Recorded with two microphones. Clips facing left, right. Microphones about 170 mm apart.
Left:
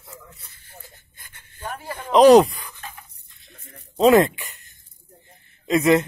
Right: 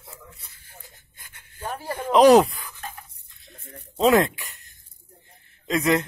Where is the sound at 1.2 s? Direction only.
10° right (ahead or behind).